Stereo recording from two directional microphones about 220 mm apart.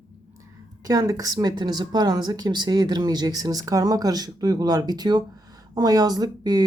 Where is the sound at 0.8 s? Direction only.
15° right (ahead or behind).